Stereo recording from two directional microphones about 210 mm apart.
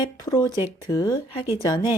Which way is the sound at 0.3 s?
20° left (ahead or behind).